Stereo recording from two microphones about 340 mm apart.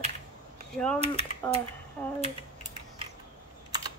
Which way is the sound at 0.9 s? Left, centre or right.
Centre.